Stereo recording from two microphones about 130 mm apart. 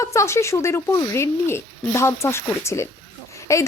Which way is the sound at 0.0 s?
25° left (ahead or behind).